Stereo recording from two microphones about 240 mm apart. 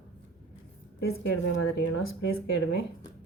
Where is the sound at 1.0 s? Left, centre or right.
Left.